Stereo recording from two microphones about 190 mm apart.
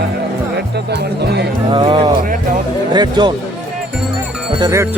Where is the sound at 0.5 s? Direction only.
60° right (ahead or behind).